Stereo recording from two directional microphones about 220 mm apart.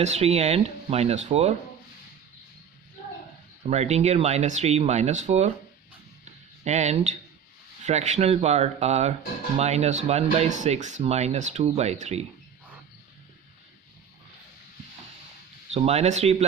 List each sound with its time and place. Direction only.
0.0 s speech: 30° right (ahead or behind)
3.7 s speech: 30° right (ahead or behind)
6.7 s speech: 30° right (ahead or behind)
15.7 s speech: 30° right (ahead or behind)